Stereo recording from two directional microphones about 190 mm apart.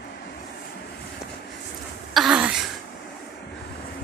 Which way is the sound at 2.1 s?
5° right (ahead or behind).